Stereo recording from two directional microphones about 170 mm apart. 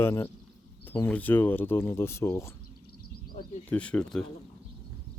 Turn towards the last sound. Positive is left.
turn(degrees=5)  # may be behind; listen again after turning